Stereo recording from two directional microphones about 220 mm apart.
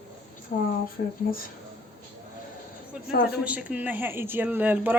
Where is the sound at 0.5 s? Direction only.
35° left (ahead or behind).